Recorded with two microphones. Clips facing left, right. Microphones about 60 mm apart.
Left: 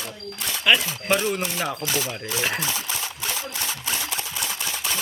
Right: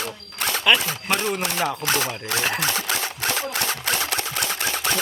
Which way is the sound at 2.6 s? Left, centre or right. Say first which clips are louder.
Right 4 dB; right.